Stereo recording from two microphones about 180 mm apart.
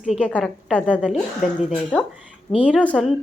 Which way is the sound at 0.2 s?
5° left (ahead or behind).